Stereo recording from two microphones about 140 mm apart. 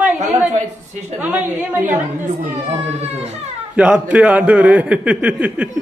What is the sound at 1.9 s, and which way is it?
Speech, 65° right (ahead or behind).